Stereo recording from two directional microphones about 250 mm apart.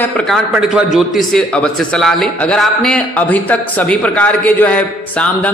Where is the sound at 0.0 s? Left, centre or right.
Centre.